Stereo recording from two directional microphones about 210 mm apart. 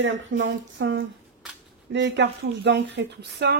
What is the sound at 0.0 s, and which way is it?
A woman's voice, 60° right (ahead or behind).